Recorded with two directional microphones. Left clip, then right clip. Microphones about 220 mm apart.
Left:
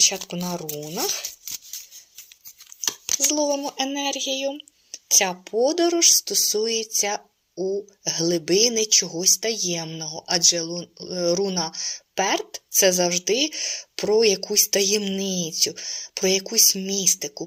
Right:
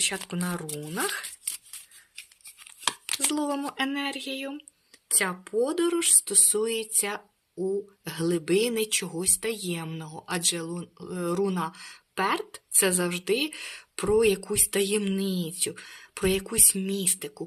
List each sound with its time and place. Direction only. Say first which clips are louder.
0.0 s speech: left 8 dB; 20° right (ahead or behind)
3.2 s speech: left 6 dB; 25° right (ahead or behind)
6.9 s a sound: left 7 dB; 15° right (ahead or behind)
8.0 s speech: left 6 dB; 15° right (ahead or behind)